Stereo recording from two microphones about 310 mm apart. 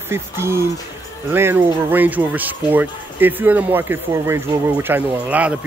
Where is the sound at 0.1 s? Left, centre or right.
Centre.